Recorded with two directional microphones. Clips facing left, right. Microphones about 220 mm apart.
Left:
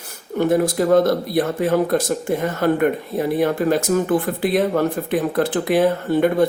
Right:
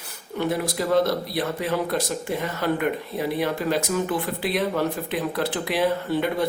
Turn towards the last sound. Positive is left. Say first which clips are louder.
# left 7 dB
turn(degrees=50)  # may be behind; listen again after turning